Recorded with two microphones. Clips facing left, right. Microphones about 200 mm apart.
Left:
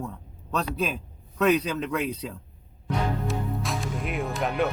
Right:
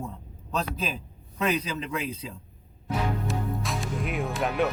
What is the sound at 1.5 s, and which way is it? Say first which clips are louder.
Speech: left 4 dB; 65° left (ahead or behind).